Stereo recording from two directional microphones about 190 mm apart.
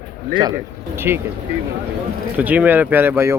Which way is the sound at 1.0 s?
10° right (ahead or behind).